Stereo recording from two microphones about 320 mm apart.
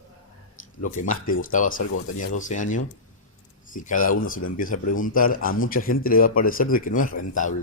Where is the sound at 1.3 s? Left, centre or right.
Left.